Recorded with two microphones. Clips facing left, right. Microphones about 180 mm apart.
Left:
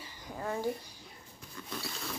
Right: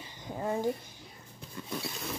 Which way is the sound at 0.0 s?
20° right (ahead or behind).